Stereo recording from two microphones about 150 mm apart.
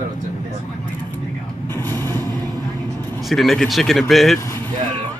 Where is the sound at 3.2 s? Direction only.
Centre (ahead or behind).